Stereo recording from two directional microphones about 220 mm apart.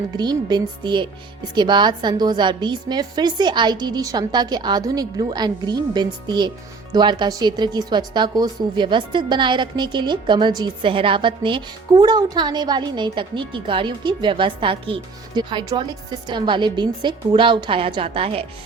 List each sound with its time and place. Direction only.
0.2 s speech: 20° right (ahead or behind)